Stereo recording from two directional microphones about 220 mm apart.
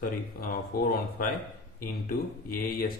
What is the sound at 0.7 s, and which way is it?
Speech, 40° left (ahead or behind).